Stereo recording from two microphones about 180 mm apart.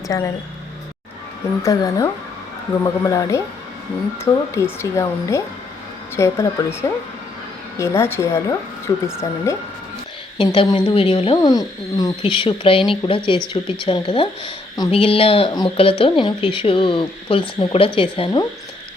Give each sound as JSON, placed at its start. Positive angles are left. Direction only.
{"t": 0.1, "sound": "a woman's voice", "side_deg": 20}
{"t": 1.6, "sound": "a woman's voice", "side_deg": 20}
{"t": 4.8, "sound": "a woman's voice", "side_deg": 15}
{"t": 10.3, "sound": "a woman's voice", "side_deg": 25}